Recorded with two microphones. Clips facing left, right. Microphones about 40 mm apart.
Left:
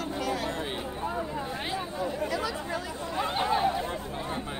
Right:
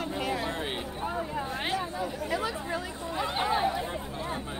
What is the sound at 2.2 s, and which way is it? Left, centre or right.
Chatter, right.